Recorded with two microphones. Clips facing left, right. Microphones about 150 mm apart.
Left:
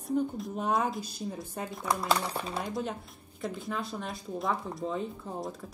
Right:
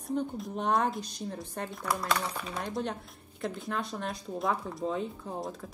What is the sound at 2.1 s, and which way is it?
Speech, 30° left (ahead or behind).